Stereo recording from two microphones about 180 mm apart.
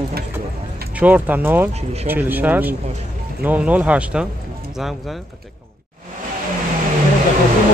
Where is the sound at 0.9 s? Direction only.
10° right (ahead or behind).